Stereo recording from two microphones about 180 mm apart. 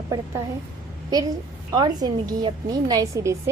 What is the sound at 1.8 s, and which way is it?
A woman's voice, 20° right (ahead or behind).